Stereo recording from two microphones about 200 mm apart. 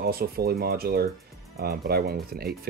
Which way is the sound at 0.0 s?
50° right (ahead or behind).